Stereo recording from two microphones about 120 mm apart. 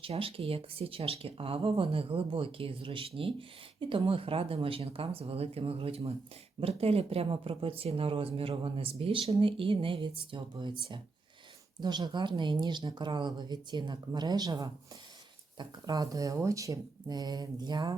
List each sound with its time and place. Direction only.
0.0 s speech: 50° right (ahead or behind); by 17.9 s 35° right (ahead or behind)